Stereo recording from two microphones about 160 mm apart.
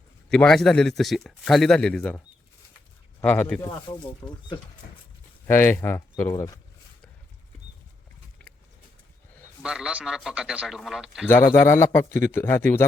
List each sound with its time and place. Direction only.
0.3 s a man's voice: 5° left (ahead or behind)
3.6 s speech: 25° left (ahead or behind)
5.5 s a man's voice: 15° left (ahead or behind)
9.6 s a man's voice: 5° right (ahead or behind)
11.3 s a man's voice: 15° left (ahead or behind)